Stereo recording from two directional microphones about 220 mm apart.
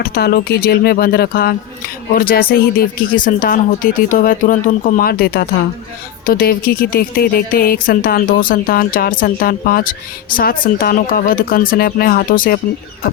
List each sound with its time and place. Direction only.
0.0 s speech: 45° left (ahead or behind)